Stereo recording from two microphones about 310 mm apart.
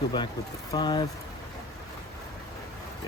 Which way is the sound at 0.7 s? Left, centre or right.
Centre.